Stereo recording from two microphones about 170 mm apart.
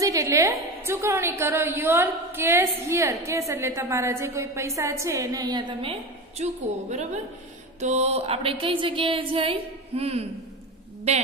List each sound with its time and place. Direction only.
0.0 s a woman's voice: 20° right (ahead or behind); by 10.2 s 35° right (ahead or behind)